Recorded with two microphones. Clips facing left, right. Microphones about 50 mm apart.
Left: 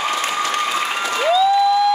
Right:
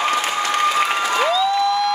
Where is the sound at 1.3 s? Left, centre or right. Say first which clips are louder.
Left 3 dB; centre.